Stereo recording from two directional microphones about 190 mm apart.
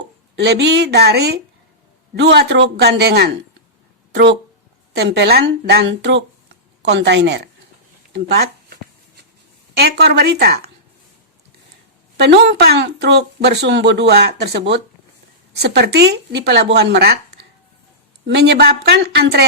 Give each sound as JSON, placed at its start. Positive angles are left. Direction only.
{"t": 0.3, "sound": "speech", "side_deg": -60}
{"t": 8.1, "sound": "a sound", "side_deg": -55}
{"t": 9.7, "sound": "speech", "side_deg": -60}
{"t": 12.1, "sound": "speech", "side_deg": -65}
{"t": 18.3, "sound": "speech", "side_deg": -60}